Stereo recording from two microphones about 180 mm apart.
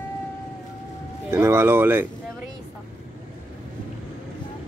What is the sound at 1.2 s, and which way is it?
Speech, 15° right (ahead or behind).